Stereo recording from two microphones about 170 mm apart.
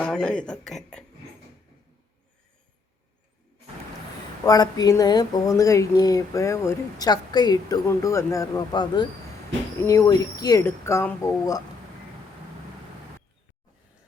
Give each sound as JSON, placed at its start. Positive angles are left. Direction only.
{"t": 0.0, "sound": "speech", "side_deg": 5}
{"t": 4.4, "sound": "speech", "side_deg": 20}